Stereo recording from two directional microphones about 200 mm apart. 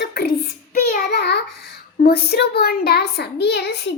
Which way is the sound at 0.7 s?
40° left (ahead or behind).